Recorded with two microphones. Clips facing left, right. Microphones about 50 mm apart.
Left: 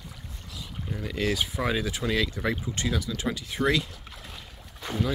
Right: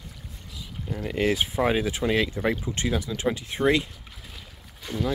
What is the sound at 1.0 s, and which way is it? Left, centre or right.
Speech, right.